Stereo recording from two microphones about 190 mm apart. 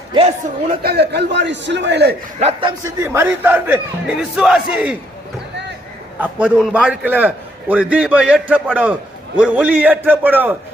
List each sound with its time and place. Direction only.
0.1 s speech: 30° right (ahead or behind)
0.7 s a man's voice: 55° right (ahead or behind)
2.4 s a man's voice: 30° right (ahead or behind)
2.8 s a man's voice: 15° right (ahead or behind)
6.1 s a man's voice: 5° right (ahead or behind)